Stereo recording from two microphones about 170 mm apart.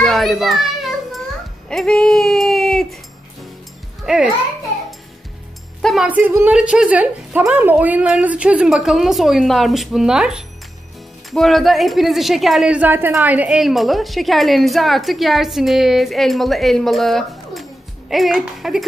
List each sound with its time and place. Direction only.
0.0 s children playing: centre (ahead or behind)
1.7 s speech: 5° left (ahead or behind)
4.0 s a child's voice: 5° right (ahead or behind)
5.8 s music: centre (ahead or behind)
6.0 s a woman's voice: 10° right (ahead or behind)